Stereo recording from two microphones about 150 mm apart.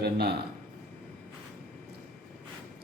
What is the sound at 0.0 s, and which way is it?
Speech, 90° right.